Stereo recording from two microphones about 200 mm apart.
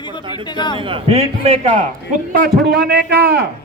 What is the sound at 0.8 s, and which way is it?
A man's voice, 25° right (ahead or behind).